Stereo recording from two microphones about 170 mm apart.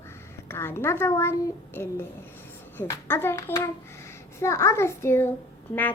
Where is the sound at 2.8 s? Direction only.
15° left (ahead or behind).